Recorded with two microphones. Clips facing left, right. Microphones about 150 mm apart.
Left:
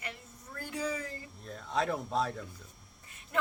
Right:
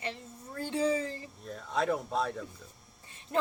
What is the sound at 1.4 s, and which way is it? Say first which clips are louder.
Speech: even; centre (ahead or behind).